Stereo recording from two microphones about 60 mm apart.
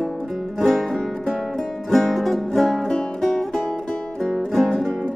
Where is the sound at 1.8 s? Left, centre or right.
Centre.